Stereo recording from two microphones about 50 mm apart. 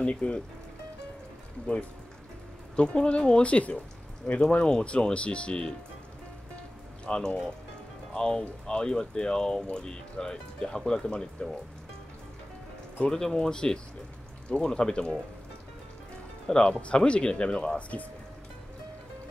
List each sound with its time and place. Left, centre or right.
0.0 s speech: left
2.7 s speech: centre
7.1 s speech: centre
13.0 s speech: centre
16.4 s speech: centre